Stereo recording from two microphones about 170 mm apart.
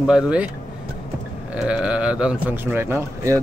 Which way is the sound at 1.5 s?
5° right (ahead or behind).